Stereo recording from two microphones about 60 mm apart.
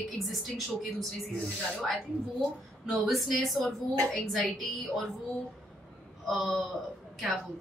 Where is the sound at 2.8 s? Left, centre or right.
Centre.